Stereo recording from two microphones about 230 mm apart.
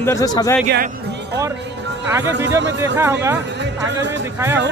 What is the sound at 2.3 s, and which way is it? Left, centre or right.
Speech, centre.